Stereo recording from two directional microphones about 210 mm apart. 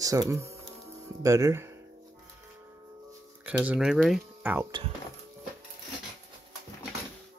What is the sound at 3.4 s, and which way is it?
Speech, 5° right (ahead or behind).